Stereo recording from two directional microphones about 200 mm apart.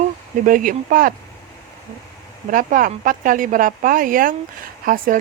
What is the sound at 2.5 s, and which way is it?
Speech, 40° right (ahead or behind).